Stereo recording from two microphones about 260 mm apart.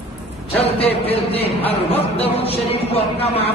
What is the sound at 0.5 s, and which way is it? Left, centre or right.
Speech, left.